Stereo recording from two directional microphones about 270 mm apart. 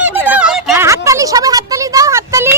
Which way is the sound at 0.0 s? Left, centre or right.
Centre.